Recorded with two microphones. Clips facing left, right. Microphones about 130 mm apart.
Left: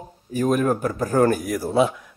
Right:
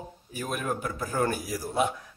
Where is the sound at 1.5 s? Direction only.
65° left (ahead or behind).